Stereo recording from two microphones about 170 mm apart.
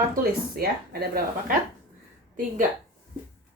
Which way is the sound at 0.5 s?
60° right (ahead or behind).